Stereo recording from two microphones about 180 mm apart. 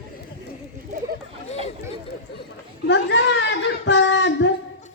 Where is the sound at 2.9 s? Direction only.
90° left.